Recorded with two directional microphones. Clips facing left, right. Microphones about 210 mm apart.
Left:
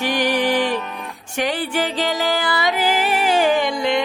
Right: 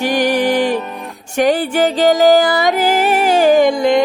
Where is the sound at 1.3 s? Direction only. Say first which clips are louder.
Right 8 dB; 45° right (ahead or behind).